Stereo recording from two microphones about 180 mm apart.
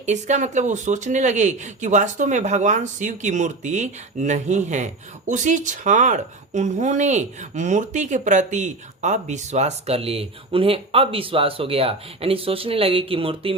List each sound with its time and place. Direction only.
0.0 s speech: 40° right (ahead or behind)